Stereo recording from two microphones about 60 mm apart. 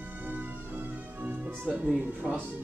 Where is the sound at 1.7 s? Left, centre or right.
Right.